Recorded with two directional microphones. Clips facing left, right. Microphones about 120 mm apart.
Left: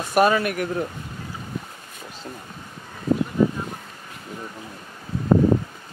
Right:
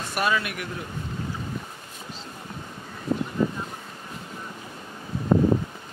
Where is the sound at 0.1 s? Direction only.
45° left (ahead or behind).